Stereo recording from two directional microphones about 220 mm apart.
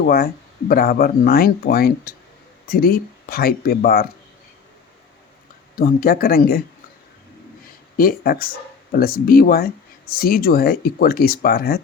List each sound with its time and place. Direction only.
0.0 s speech: 45° left (ahead or behind)
5.7 s speech: 40° left (ahead or behind)
7.9 s speech: 45° left (ahead or behind)